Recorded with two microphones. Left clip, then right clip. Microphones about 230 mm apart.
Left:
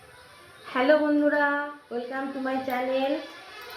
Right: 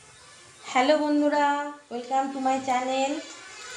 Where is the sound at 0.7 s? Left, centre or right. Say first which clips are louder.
Even; right.